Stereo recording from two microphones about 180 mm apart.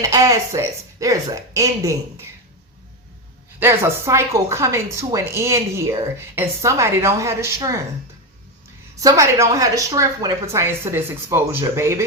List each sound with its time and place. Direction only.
0.0 s speech: 20° right (ahead or behind)
3.6 s speech: 15° right (ahead or behind)
9.0 s speech: 15° right (ahead or behind)